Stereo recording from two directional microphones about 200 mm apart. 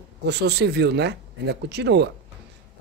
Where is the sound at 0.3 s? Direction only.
55° right (ahead or behind).